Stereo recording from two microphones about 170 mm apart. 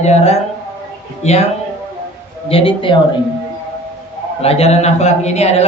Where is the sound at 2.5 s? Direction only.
30° left (ahead or behind).